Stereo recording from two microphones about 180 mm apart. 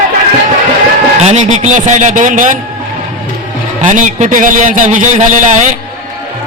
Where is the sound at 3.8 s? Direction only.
45° right (ahead or behind).